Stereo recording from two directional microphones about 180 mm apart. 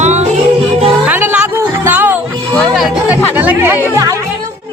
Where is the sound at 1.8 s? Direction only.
10° right (ahead or behind).